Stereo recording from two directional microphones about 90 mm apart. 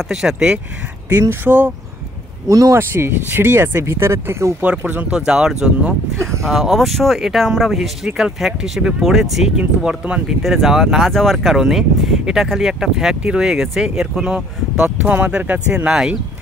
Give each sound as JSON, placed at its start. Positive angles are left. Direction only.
{"t": 0.1, "sound": "speech", "side_deg": -5}
{"t": 1.2, "sound": "speech", "side_deg": -25}
{"t": 2.4, "sound": "speech", "side_deg": -40}
{"t": 2.8, "sound": "speech", "side_deg": -25}
{"t": 4.6, "sound": "speech", "side_deg": -15}